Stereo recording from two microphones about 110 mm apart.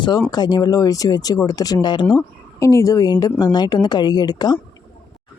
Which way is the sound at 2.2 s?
30° left (ahead or behind).